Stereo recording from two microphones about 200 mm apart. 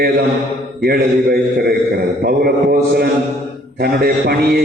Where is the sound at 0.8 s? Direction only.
50° right (ahead or behind).